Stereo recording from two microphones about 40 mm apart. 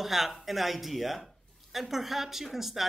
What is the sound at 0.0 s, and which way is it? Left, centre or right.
Speech, centre.